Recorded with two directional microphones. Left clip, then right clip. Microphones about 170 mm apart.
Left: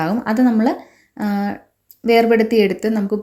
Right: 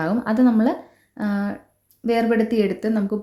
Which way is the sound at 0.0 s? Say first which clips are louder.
Left 2 dB; 10° left (ahead or behind).